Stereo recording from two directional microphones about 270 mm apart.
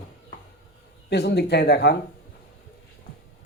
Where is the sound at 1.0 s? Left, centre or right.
Left.